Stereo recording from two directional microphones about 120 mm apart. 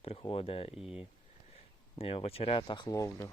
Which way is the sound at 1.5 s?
55° left (ahead or behind).